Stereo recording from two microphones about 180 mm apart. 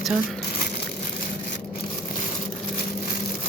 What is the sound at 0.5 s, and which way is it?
Crushing, 55° left (ahead or behind).